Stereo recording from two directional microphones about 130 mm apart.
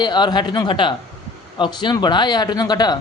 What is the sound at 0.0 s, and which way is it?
A man's voice, 35° left (ahead or behind).